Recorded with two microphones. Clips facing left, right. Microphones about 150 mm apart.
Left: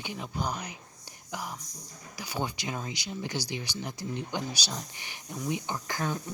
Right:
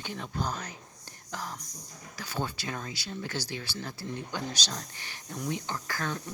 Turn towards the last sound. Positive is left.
turn(degrees=15)  # may be behind; listen again after turning